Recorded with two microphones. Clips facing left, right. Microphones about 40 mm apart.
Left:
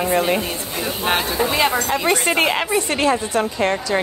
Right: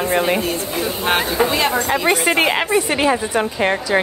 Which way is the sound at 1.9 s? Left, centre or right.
Centre.